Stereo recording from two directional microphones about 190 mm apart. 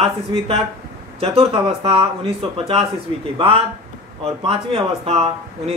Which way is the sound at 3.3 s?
25° right (ahead or behind).